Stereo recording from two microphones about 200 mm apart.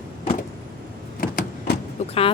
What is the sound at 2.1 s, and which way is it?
Music, 30° left (ahead or behind).